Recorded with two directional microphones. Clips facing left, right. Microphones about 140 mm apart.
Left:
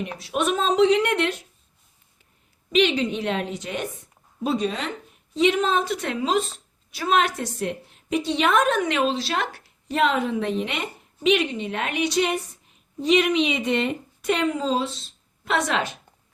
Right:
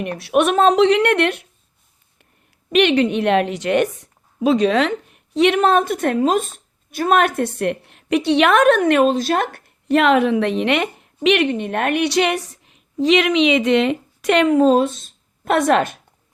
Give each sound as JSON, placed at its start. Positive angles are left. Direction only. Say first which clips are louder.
{"t": 0.0, "sound": "a woman's voice", "louder": "right 8 dB", "side_deg": -65}
{"t": 2.6, "sound": "a woman's voice", "louder": "right 5 dB", "side_deg": -65}